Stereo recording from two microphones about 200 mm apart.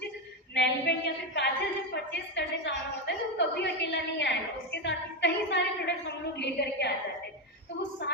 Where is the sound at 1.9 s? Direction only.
60° left (ahead or behind).